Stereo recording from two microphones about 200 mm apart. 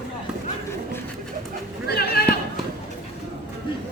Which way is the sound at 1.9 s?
50° left (ahead or behind).